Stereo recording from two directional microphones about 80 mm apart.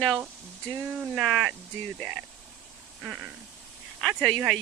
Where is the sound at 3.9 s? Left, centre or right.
Centre.